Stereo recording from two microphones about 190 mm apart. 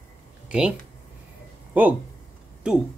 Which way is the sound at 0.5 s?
5° right (ahead or behind).